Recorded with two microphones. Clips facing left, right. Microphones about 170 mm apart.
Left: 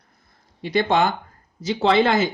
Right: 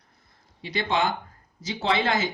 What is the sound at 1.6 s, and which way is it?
Speech, 60° left (ahead or behind).